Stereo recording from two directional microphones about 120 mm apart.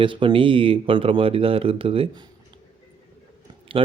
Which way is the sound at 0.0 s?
45° right (ahead or behind).